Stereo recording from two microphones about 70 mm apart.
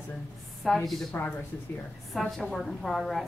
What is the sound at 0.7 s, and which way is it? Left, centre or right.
Speech, centre.